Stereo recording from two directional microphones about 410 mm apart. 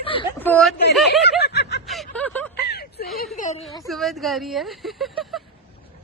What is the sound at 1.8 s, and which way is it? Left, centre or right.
Speech, centre.